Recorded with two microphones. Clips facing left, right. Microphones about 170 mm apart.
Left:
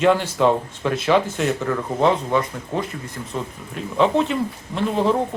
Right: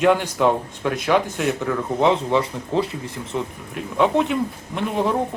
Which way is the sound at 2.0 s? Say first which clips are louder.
Even; 20° right (ahead or behind).